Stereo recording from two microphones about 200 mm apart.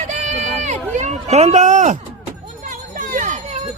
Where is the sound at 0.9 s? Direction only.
35° right (ahead or behind).